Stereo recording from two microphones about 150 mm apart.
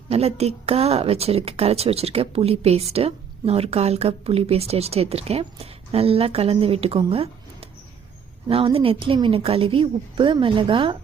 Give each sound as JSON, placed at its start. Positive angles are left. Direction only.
{"t": 0.1, "sound": "a woman's voice", "side_deg": -45}
{"t": 7.0, "sound": "a sound", "side_deg": -40}
{"t": 8.4, "sound": "speech", "side_deg": -40}